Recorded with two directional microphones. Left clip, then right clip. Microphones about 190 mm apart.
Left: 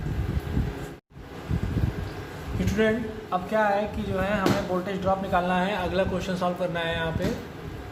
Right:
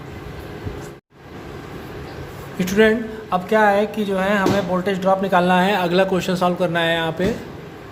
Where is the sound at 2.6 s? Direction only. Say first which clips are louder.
Right 9 dB; 45° right (ahead or behind).